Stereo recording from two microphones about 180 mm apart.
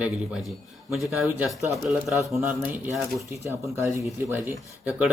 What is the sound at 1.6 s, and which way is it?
Speech, 15° right (ahead or behind).